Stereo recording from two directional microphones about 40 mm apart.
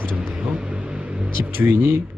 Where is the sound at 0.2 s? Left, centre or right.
Right.